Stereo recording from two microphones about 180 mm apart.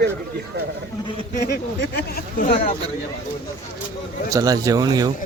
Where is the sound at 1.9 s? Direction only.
50° left (ahead or behind).